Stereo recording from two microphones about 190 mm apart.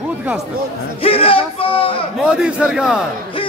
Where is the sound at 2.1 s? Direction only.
5° right (ahead or behind).